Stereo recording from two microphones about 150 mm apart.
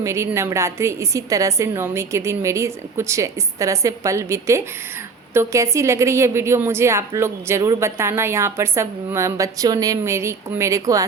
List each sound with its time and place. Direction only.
0.0 s a woman's voice: 20° right (ahead or behind)